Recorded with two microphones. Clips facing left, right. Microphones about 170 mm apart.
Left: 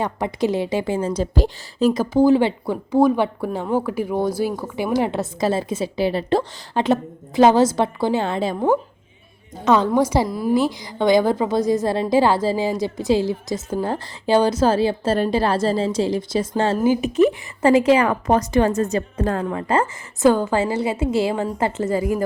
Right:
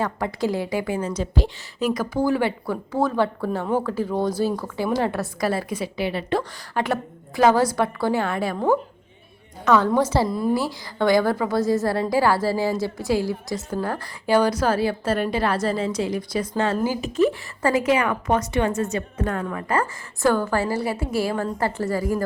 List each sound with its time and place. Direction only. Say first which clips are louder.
0.0 s a woman's voice: left 2 dB; 20° left (ahead or behind)
9.6 s speech: left 2 dB; 20° left (ahead or behind)
10.2 s a woman's voice: even; centre (ahead or behind)
10.5 s a woman's voice: left 5 dB; 20° left (ahead or behind)